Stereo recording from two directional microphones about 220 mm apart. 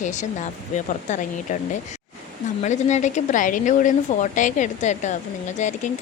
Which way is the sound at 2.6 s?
30° left (ahead or behind).